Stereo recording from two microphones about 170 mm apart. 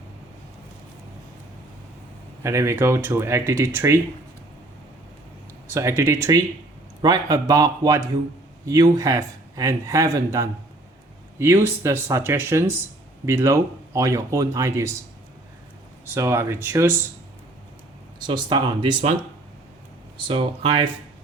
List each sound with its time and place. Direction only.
2.4 s speech: 15° right (ahead or behind)
5.6 s speech: 15° right (ahead or behind)
16.1 s speech: 15° right (ahead or behind)
18.2 s speech: 25° right (ahead or behind)
20.2 s speech: 30° right (ahead or behind)